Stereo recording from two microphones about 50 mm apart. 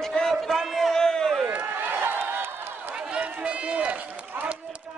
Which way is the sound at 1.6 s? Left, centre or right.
Right.